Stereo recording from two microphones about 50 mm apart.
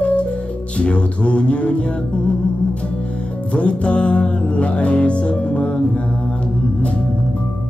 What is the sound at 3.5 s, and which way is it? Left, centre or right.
Music, left.